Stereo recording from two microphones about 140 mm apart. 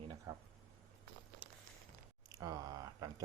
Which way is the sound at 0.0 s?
35° right (ahead or behind).